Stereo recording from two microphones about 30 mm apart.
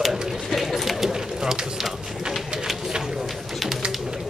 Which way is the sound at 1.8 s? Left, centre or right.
Centre.